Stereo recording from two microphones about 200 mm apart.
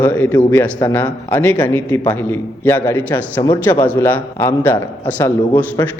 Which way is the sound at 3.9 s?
10° left (ahead or behind).